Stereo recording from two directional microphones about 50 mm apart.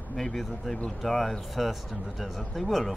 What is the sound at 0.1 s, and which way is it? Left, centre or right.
Speech, centre.